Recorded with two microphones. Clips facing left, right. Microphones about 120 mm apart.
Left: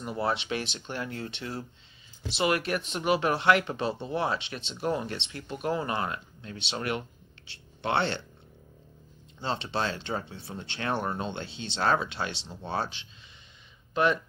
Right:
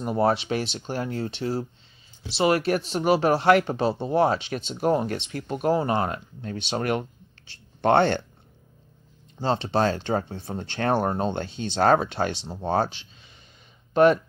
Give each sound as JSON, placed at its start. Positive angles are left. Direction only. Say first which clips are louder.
{"t": 0.0, "sound": "speech", "louder": "right 7 dB", "side_deg": -45}
{"t": 9.4, "sound": "speech", "louder": "right 8 dB", "side_deg": -40}